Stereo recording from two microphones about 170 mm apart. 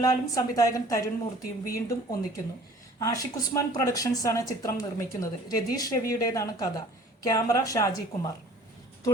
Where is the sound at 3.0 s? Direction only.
20° left (ahead or behind).